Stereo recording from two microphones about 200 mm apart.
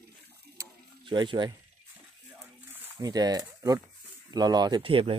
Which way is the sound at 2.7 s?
20° right (ahead or behind).